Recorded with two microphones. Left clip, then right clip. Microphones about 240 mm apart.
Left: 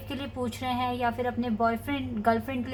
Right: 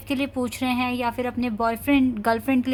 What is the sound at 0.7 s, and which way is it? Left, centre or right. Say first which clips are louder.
Speech: right 1 dB; right.